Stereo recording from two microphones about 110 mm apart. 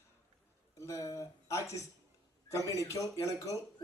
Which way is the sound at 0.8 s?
30° left (ahead or behind).